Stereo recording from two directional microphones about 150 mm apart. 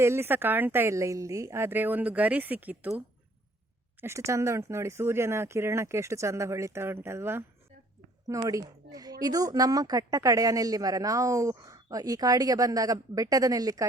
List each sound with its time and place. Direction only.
0.0 s speech: 15° right (ahead or behind)
4.0 s a woman's voice: 20° right (ahead or behind)